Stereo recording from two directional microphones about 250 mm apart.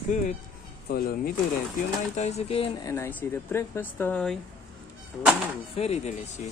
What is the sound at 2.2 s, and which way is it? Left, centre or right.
Speech, left.